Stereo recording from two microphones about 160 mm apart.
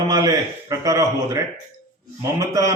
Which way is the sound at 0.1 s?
20° right (ahead or behind).